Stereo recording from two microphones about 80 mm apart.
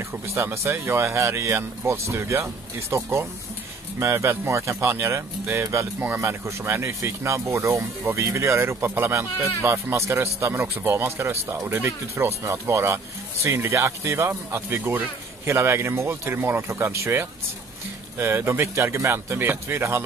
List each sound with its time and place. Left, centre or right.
0.3 s speech: right
10.5 s speech: right